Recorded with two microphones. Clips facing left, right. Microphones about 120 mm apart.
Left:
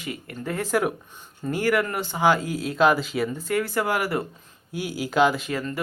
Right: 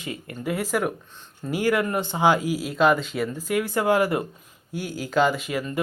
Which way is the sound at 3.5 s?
15° right (ahead or behind).